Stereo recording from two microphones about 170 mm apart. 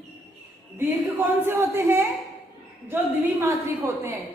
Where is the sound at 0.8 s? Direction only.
15° right (ahead or behind).